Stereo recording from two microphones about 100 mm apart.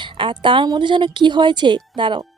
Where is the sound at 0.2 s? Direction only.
55° right (ahead or behind).